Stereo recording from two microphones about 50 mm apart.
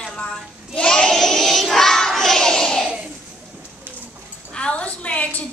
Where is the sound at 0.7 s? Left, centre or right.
Centre.